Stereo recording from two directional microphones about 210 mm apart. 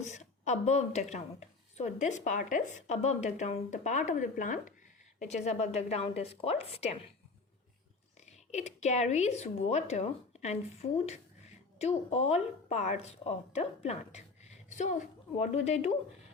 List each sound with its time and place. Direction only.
0.0 s a woman's voice: 35° left (ahead or behind)
8.4 s speech: 35° left (ahead or behind)